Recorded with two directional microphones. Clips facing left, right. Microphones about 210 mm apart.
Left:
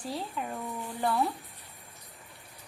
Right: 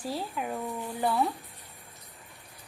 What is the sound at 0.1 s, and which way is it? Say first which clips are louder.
Speech: right 2 dB; 5° right (ahead or behind).